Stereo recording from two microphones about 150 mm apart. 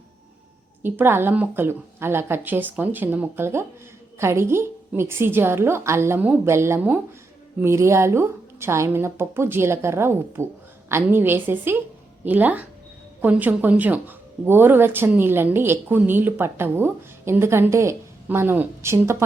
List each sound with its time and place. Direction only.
0.8 s a woman's voice: 15° right (ahead or behind)